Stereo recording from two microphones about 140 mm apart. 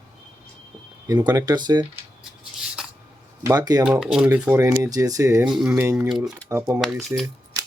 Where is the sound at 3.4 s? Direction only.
30° right (ahead or behind).